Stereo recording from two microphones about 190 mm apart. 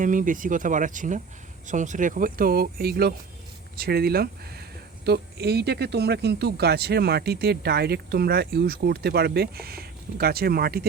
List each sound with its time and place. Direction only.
0.0 s speech: 45° right (ahead or behind)